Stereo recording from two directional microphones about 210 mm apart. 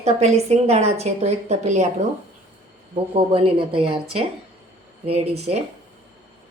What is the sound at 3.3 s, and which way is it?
Speech, 25° right (ahead or behind).